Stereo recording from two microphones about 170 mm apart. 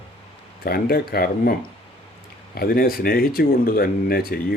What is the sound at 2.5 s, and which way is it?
Speech, 60° left (ahead or behind).